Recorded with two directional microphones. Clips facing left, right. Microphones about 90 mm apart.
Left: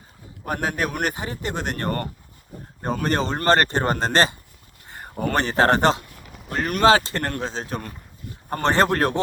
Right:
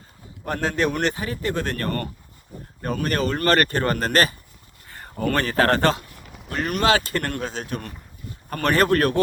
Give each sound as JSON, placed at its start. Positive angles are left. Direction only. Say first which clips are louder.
{"t": 0.4, "sound": "speech", "louder": "right 2 dB", "side_deg": 10}
{"t": 1.1, "sound": "speech", "louder": "right 3 dB", "side_deg": 20}
{"t": 6.0, "sound": "a sound", "louder": "even", "side_deg": 0}
{"t": 6.5, "sound": "speech", "louder": "left 3 dB", "side_deg": 40}